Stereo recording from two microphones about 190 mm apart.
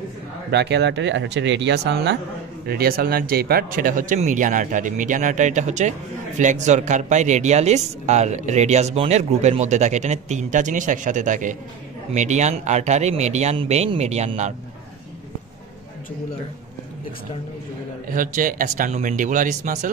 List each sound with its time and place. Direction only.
0.5 s speech: 65° right (ahead or behind); by 14.5 s 35° right (ahead or behind)
18.1 s speech: 45° right (ahead or behind)